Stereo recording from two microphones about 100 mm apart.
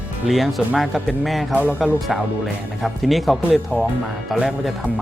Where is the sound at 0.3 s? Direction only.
Centre (ahead or behind).